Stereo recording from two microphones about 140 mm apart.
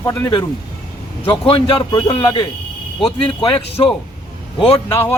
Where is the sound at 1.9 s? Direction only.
25° left (ahead or behind).